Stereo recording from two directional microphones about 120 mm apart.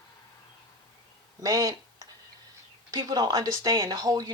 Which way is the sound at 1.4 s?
30° right (ahead or behind).